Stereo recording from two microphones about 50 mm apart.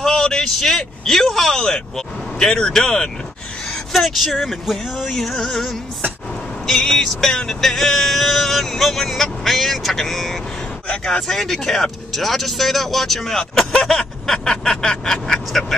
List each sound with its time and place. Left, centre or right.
0.0 s speech: centre
3.7 s speech: centre
10.9 s speech: centre